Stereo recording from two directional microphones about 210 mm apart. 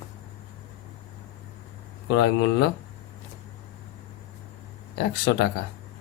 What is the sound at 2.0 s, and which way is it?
Speech, 55° left (ahead or behind).